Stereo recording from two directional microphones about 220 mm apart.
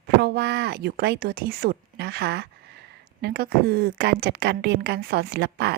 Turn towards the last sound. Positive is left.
turn(degrees=-50)  # may be behind; listen again after turning